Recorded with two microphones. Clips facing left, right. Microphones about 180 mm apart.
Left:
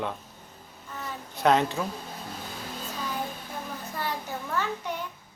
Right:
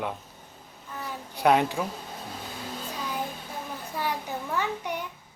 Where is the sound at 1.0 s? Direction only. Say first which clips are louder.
Even; 10° right (ahead or behind).